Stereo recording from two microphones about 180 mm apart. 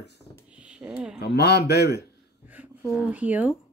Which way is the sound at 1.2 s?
65° left (ahead or behind).